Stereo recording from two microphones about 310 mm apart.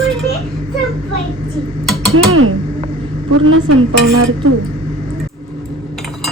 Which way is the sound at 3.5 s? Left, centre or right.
Right.